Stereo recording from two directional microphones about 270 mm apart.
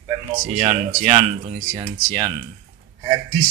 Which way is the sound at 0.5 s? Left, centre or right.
Right.